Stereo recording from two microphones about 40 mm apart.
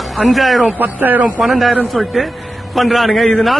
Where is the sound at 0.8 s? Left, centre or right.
Right.